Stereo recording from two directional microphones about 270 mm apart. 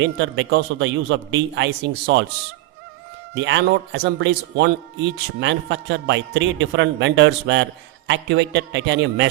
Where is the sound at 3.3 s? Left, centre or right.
Right.